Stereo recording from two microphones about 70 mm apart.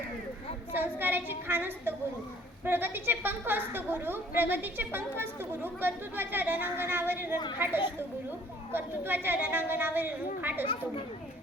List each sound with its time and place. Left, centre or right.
0.7 s a woman's voice: right